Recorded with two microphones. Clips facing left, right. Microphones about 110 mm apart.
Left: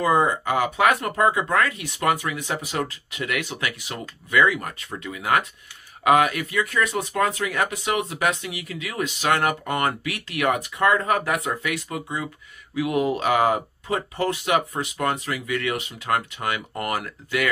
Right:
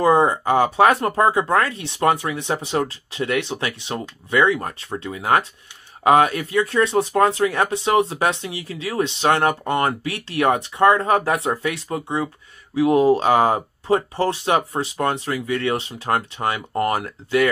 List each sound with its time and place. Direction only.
0.0 s speech: 30° right (ahead or behind)